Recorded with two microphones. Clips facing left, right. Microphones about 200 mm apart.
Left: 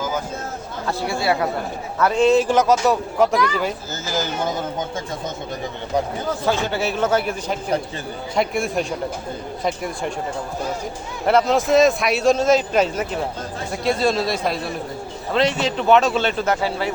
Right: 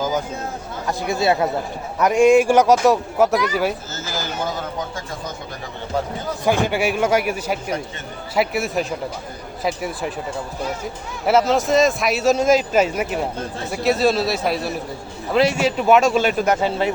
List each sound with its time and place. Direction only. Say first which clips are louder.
0.9 s speech: right 2 dB; 20° right (ahead or behind)
4.2 s speech: left 2 dB; 20° left (ahead or behind)
6.4 s speech: right 4 dB; 15° right (ahead or behind)
11.3 s speech: even; centre (ahead or behind); by 16.9 s 20° right (ahead or behind)